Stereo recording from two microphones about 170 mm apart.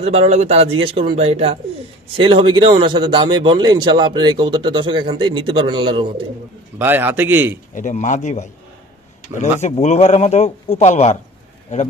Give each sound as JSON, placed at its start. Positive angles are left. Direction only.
{"t": 0.0, "sound": "a man's voice", "side_deg": -40}
{"t": 6.8, "sound": "a man's voice", "side_deg": -10}
{"t": 7.7, "sound": "a man's voice", "side_deg": 50}